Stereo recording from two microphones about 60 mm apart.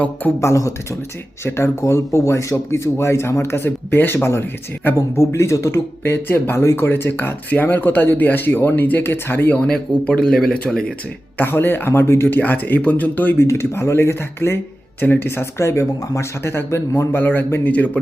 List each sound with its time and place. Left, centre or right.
0.3 s a man's voice: left
1.5 s speech: left
1.8 s speech: left
4.9 s speech: left
9.6 s speech: centre
11.3 s speech: left
12.4 s speech: left
13.4 s speech: left
15.0 s speech: left
17.7 s speech: left